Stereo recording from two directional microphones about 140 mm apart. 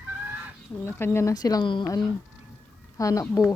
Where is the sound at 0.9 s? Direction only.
15° left (ahead or behind); by 1.9 s 35° left (ahead or behind).